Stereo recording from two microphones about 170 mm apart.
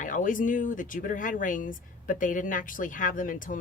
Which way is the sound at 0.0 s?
50° left (ahead or behind).